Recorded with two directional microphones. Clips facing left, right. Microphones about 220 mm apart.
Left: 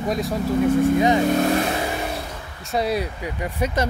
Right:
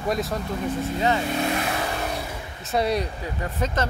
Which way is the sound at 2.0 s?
Centre (ahead or behind).